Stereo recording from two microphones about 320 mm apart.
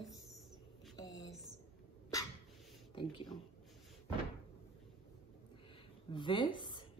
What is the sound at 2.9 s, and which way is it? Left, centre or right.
Speech, centre.